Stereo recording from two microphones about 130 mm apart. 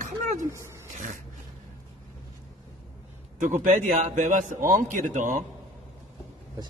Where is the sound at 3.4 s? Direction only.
80° right.